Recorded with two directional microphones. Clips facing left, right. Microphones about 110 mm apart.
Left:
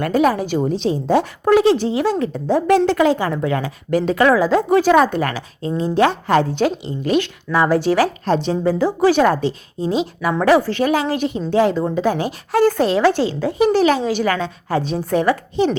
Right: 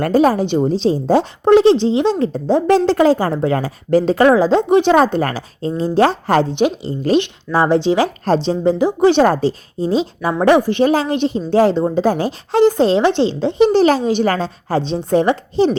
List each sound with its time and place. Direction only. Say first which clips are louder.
0.0 s a woman's voice: right 3 dB; 35° right (ahead or behind)
6.5 s speech: right 2 dB; 20° right (ahead or behind)
6.8 s a woman's voice: right 3 dB; 35° right (ahead or behind)
8.2 s speech: right 2 dB; 35° right (ahead or behind)
10.4 s a woman's voice: right 3 dB; 20° right (ahead or behind)